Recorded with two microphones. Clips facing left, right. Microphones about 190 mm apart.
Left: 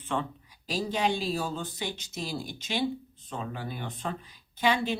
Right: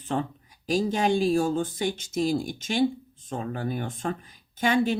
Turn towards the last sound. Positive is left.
turn(degrees=-45)  # may be behind; listen again after turning